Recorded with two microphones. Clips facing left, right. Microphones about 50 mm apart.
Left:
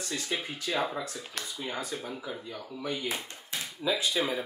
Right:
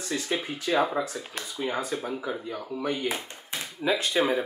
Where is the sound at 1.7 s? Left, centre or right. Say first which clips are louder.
Right 7 dB; right.